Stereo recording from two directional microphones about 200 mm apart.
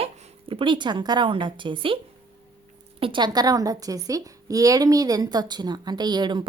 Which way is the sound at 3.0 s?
25° right (ahead or behind).